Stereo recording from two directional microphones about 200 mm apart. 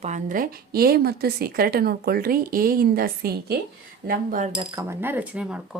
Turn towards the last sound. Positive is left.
turn(degrees=-5)  # may be behind; listen again after turning